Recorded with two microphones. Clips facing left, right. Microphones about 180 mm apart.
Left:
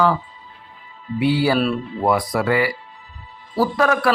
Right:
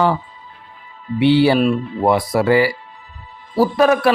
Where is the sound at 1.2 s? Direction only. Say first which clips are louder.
Right 5 dB; 25° right (ahead or behind).